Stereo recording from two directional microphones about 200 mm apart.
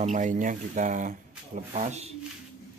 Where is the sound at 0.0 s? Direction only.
40° right (ahead or behind).